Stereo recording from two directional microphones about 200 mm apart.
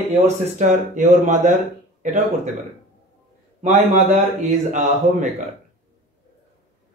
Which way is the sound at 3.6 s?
35° right (ahead or behind).